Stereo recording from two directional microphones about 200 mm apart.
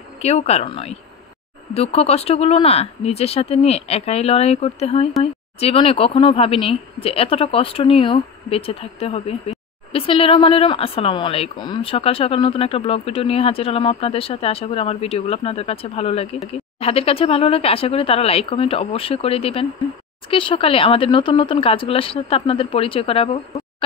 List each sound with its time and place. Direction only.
0.2 s speech: 30° left (ahead or behind)